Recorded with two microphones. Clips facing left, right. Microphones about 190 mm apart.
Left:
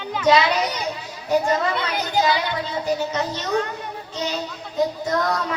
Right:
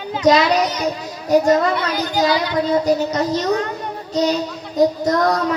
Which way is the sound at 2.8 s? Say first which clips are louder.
Right 6 dB; 40° right (ahead or behind).